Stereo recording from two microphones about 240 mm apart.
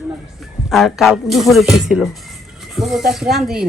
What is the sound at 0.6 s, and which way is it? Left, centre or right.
Speech, centre.